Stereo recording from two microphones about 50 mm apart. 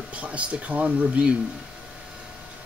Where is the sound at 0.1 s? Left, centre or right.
Right.